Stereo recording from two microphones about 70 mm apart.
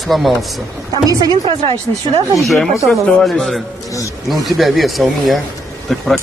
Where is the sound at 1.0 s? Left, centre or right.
Right.